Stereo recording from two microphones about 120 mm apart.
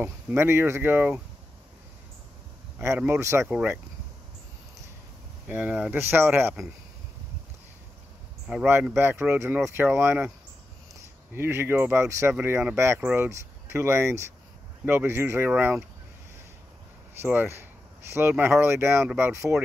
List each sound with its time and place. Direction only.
0.0 s speech: 15° right (ahead or behind)
3.1 s speech: 25° right (ahead or behind)
3.4 s speech: 10° right (ahead or behind)
5.5 s speech: 10° right (ahead or behind)
8.6 s speech: 15° right (ahead or behind)
11.3 s speech: 20° right (ahead or behind)
17.2 s speech: 15° right (ahead or behind)